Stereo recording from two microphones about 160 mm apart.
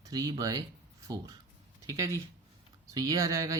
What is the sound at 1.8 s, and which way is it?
Speech, 20° right (ahead or behind).